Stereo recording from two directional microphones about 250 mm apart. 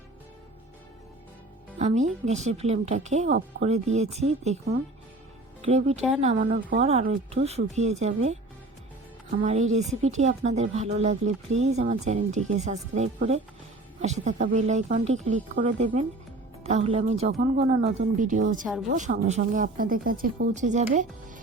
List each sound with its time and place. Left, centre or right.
1.8 s speech: right
5.6 s speech: right